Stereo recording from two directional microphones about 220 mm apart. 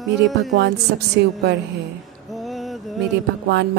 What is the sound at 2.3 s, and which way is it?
Music, centre (ahead or behind).